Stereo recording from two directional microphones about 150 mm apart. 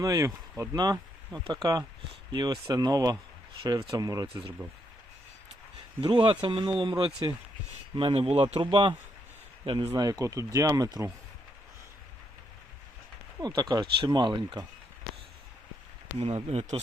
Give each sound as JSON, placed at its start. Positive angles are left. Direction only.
{"t": 0.0, "sound": "speech", "side_deg": -20}
{"t": 2.3, "sound": "speech", "side_deg": -30}
{"t": 6.0, "sound": "speech", "side_deg": -35}
{"t": 9.9, "sound": "speech", "side_deg": -25}
{"t": 13.4, "sound": "speech", "side_deg": -25}
{"t": 16.1, "sound": "speech", "side_deg": -45}